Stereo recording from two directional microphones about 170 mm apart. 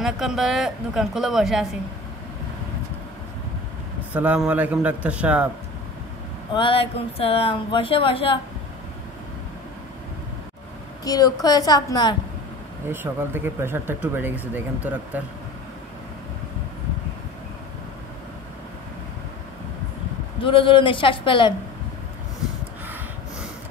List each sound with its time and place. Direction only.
0.0 s a woman's voice: centre (ahead or behind)
4.1 s speech: 5° right (ahead or behind)
6.5 s speech: 30° left (ahead or behind)
11.1 s a woman's voice: 20° left (ahead or behind)
12.9 s speech: 10° right (ahead or behind)
20.3 s a woman's voice: 30° left (ahead or behind)